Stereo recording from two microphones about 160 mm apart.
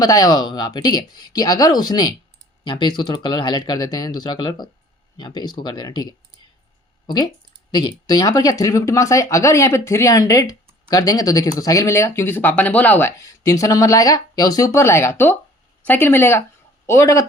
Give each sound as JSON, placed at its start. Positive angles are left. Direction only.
{"t": 0.0, "sound": "speech", "side_deg": 25}
{"t": 7.7, "sound": "a man's voice", "side_deg": 25}